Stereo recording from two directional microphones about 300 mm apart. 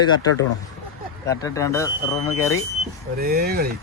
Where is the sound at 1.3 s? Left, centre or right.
Centre.